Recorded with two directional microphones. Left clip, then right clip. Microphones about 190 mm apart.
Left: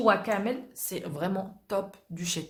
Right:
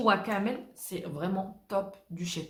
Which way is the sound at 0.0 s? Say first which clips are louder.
Left 2 dB; 30° left (ahead or behind).